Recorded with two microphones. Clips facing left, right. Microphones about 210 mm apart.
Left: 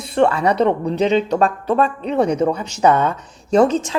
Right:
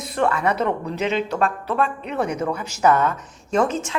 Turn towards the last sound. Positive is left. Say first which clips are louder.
# left 6 dB
turn(degrees=35)  # may be behind; listen again after turning